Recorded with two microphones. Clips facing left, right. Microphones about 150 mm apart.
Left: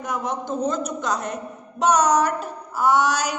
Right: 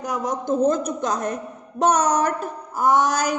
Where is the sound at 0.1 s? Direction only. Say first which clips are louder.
Right 3 dB; 40° right (ahead or behind).